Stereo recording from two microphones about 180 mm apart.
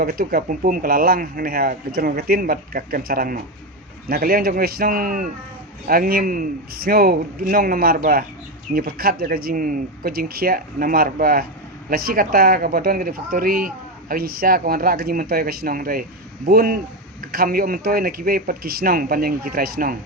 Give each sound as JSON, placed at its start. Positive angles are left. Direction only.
{"t": 0.0, "sound": "a man's voice", "side_deg": -55}